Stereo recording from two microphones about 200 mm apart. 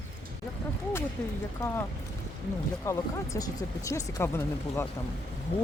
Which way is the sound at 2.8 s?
15° left (ahead or behind).